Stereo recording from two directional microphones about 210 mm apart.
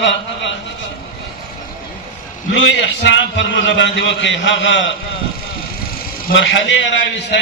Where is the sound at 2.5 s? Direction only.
60° left (ahead or behind).